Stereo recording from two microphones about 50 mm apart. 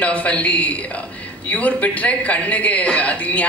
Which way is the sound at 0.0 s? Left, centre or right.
Left.